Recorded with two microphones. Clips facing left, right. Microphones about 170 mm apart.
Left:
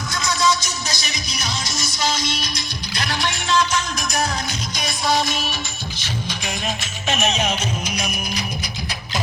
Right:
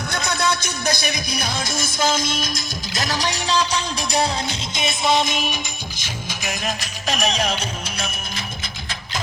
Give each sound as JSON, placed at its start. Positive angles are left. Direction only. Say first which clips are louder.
{"t": 0.1, "sound": "music", "louder": "left 2 dB", "side_deg": -60}
{"t": 6.0, "sound": "music", "louder": "left 4 dB", "side_deg": -5}